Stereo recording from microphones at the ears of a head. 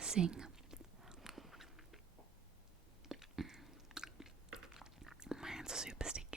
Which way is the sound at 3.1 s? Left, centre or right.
Centre.